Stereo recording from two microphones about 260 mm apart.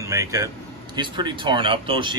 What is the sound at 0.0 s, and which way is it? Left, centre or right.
A man's voice, centre.